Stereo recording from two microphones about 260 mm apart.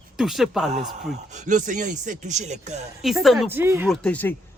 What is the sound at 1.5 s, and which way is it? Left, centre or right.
Speech, right.